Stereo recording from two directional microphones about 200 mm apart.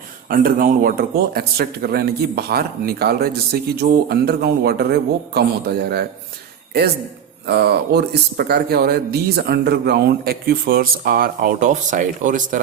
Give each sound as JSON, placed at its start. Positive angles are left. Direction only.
{"t": 0.3, "sound": "speech", "side_deg": -45}
{"t": 7.4, "sound": "speech", "side_deg": -55}